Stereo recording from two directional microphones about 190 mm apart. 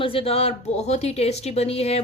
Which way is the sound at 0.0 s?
30° left (ahead or behind).